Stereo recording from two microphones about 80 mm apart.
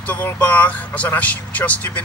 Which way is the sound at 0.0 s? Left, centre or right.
Centre.